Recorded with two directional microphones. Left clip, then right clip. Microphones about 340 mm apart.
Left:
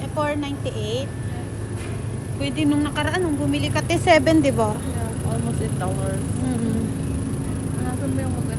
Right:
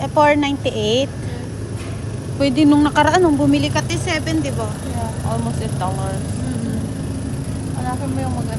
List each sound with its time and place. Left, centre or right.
0.0 s a woman's voice: centre
2.4 s a woman's voice: centre
3.8 s speech: centre